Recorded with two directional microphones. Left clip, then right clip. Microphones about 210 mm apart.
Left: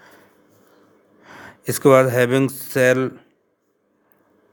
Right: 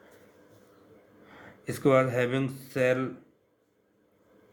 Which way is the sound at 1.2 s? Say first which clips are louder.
Left 11 dB; 45° left (ahead or behind).